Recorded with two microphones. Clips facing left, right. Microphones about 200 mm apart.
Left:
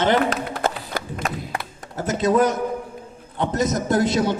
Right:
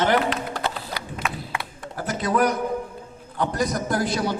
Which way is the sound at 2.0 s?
25° left (ahead or behind).